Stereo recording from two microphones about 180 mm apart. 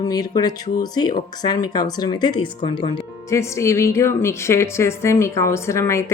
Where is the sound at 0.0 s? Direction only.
20° left (ahead or behind).